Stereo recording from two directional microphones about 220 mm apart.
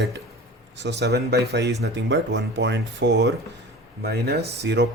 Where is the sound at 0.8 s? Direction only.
50° right (ahead or behind).